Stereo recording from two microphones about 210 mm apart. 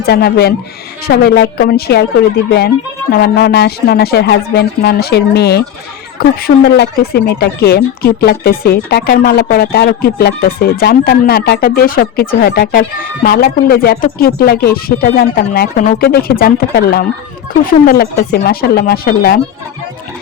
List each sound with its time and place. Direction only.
0.0 s speech: 50° left (ahead or behind)